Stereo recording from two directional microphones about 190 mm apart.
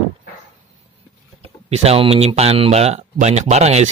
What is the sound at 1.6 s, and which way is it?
Speech, 30° right (ahead or behind).